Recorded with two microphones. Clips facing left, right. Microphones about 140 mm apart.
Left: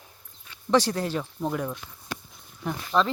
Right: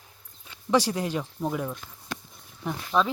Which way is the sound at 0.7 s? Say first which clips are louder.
Left 1 dB; 10° right (ahead or behind).